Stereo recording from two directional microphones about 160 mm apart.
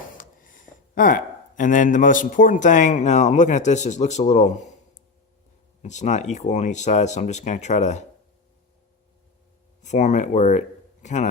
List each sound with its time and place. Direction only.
0.2 s speech: 60° left (ahead or behind)
5.8 s speech: 45° left (ahead or behind)
9.8 s a man's voice: 45° left (ahead or behind)